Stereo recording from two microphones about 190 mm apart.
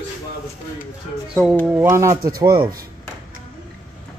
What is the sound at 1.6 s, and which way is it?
Speech, 10° right (ahead or behind).